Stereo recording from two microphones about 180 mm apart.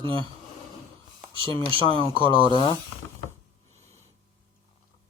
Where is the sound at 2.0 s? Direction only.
30° right (ahead or behind).